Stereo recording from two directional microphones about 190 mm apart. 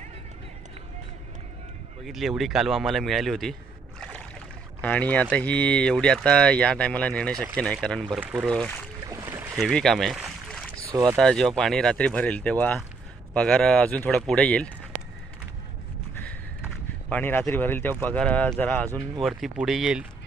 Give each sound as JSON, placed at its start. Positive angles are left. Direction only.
{"t": 2.0, "sound": "speech", "side_deg": 0}
{"t": 4.8, "sound": "speech", "side_deg": 10}
{"t": 9.0, "sound": "boat", "side_deg": -15}
{"t": 9.6, "sound": "speech", "side_deg": 0}
{"t": 10.9, "sound": "speech", "side_deg": -20}
{"t": 11.1, "sound": "speech", "side_deg": 5}
{"t": 17.1, "sound": "speech", "side_deg": 10}